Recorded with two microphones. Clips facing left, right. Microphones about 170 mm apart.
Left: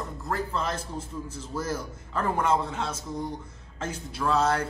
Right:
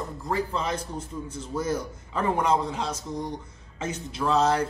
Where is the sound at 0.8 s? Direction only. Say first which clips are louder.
Right 1 dB; 30° left (ahead or behind).